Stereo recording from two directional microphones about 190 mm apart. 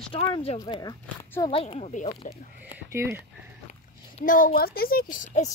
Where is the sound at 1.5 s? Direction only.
30° left (ahead or behind).